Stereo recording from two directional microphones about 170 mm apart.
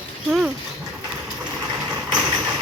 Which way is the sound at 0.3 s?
10° right (ahead or behind).